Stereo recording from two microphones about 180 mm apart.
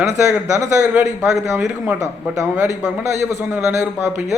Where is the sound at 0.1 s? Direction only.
15° right (ahead or behind).